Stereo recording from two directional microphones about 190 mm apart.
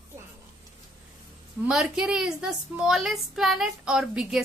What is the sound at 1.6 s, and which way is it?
A woman's voice, centre (ahead or behind).